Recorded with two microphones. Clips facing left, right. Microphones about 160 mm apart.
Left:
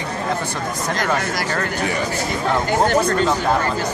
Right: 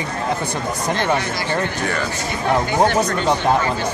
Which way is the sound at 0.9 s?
25° right (ahead or behind).